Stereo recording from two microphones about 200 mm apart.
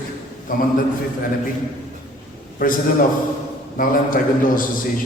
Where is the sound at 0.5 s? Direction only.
45° left (ahead or behind).